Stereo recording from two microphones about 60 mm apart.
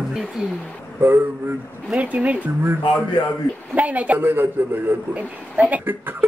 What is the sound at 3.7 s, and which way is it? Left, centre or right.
Speech, right.